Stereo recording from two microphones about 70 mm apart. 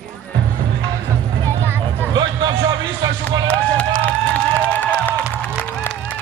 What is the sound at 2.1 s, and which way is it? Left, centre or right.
Speech, right.